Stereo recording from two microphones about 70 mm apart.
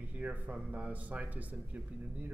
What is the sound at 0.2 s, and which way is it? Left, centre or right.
Speech, right.